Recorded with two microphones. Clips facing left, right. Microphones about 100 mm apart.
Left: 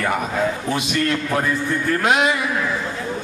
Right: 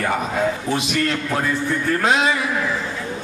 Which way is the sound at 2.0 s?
30° right (ahead or behind).